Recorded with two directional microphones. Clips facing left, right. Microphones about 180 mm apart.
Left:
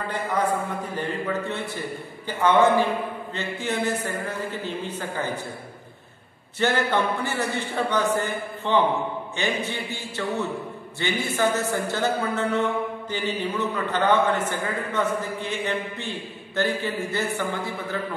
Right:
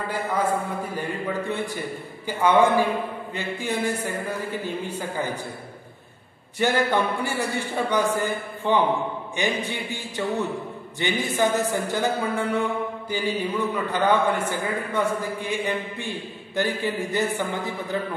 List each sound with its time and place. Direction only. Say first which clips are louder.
0.9 s a man's voice: left 2 dB; 10° right (ahead or behind)
6.6 s a man's voice: right 1 dB; 10° right (ahead or behind)